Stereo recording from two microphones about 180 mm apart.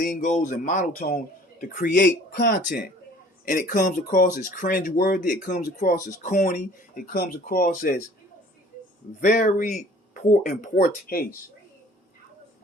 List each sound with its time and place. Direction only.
0.2 s speech: 40° left (ahead or behind)
9.2 s speech: 45° left (ahead or behind)